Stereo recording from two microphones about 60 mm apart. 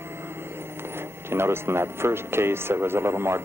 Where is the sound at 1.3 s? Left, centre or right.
Right.